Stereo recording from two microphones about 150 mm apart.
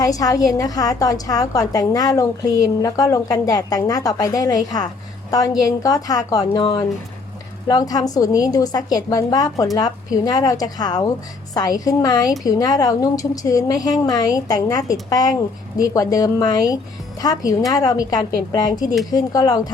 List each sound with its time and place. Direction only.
0.0 s speech: 25° left (ahead or behind)